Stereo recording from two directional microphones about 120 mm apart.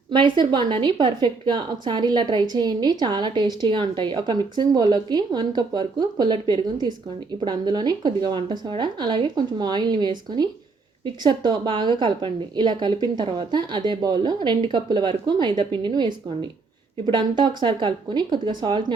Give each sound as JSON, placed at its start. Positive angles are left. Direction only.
{"t": 0.1, "sound": "a woman's voice", "side_deg": -40}